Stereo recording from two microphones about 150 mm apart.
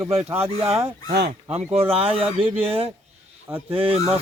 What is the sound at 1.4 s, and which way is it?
Speech, 45° right (ahead or behind).